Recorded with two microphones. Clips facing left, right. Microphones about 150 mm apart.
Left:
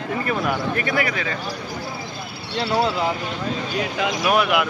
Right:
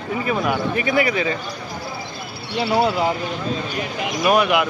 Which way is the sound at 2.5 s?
15° right (ahead or behind).